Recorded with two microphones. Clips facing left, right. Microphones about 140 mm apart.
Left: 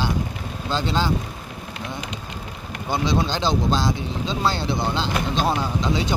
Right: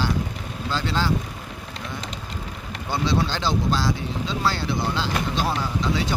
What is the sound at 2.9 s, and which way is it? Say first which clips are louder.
Speech: left 1 dB; 15° left (ahead or behind).